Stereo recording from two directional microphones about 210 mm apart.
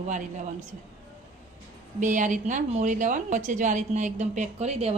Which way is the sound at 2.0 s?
35° right (ahead or behind).